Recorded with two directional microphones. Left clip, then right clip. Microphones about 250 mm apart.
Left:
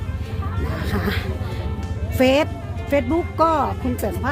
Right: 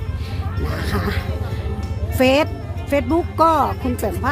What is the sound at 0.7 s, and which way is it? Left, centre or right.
Speech, centre.